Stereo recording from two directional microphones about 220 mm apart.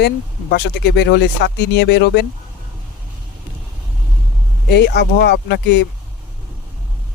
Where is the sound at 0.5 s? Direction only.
50° left (ahead or behind).